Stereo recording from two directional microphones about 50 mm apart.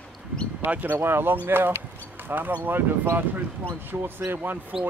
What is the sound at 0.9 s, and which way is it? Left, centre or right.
A man's voice, right.